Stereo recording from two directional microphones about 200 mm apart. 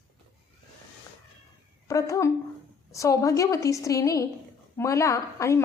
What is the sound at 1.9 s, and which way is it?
A woman's voice, 15° left (ahead or behind).